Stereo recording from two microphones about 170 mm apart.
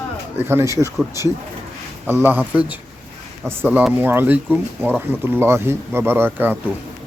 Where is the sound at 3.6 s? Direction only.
10° right (ahead or behind).